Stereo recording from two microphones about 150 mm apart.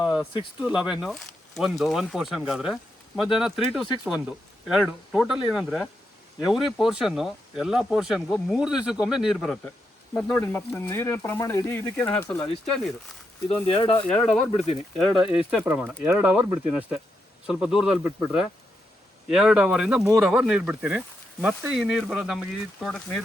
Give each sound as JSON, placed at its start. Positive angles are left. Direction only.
{"t": 0.0, "sound": "a sound", "side_deg": -5}
{"t": 0.6, "sound": "speech", "side_deg": -5}
{"t": 13.7, "sound": "speech", "side_deg": 40}
{"t": 14.1, "sound": "speech", "side_deg": 5}